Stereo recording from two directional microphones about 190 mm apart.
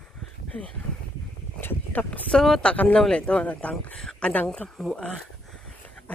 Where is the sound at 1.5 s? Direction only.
10° left (ahead or behind).